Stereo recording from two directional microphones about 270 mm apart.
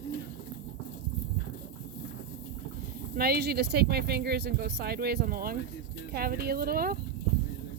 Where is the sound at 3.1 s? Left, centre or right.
Right.